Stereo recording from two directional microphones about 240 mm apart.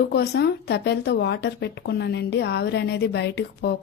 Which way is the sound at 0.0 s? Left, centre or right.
Left.